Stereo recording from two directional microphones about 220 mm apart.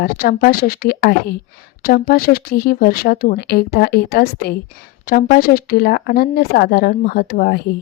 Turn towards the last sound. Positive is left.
turn(degrees=45)  # may be behind; listen again after turning